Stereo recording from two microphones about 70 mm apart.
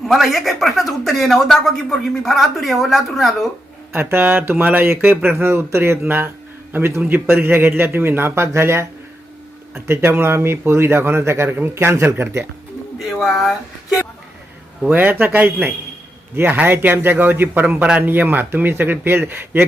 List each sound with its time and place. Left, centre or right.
0.0 s speech: centre
3.9 s a man's voice: right
13.0 s speech: centre
14.8 s a man's voice: right